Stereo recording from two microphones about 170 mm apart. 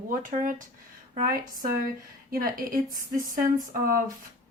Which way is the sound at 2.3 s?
55° right (ahead or behind).